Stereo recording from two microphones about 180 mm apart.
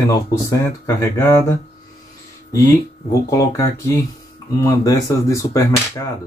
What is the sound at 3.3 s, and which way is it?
Speech, 15° left (ahead or behind).